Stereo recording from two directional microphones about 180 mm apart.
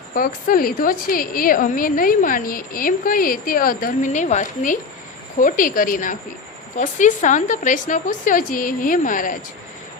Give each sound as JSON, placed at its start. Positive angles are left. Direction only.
{"t": 0.1, "sound": "a woman's voice", "side_deg": 50}